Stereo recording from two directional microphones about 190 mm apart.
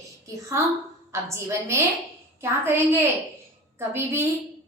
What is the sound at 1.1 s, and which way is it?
A woman's voice, 15° right (ahead or behind).